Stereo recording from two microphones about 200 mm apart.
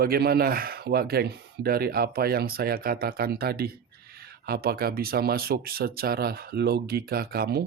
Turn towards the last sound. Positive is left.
turn(degrees=-50)  # may be behind; listen again after turning